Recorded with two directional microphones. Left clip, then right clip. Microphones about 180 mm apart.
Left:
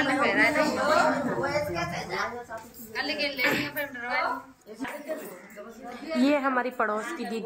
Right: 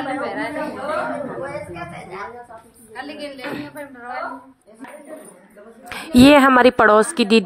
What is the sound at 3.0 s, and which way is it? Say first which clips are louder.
Speech: left 4 dB; 35° right (ahead or behind).